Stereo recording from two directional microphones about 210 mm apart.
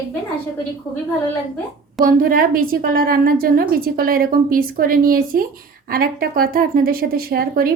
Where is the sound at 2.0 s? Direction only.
40° right (ahead or behind).